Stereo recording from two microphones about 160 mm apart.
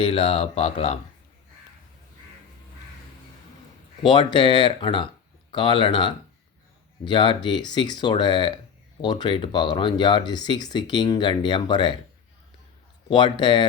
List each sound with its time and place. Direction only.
0.0 s speech: 35° left (ahead or behind)
4.0 s speech: 30° left (ahead or behind)
13.1 s speech: 30° left (ahead or behind)